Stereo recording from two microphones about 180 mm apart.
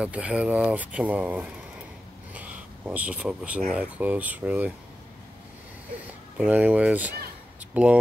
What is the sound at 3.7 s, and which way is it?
Speech, 10° right (ahead or behind).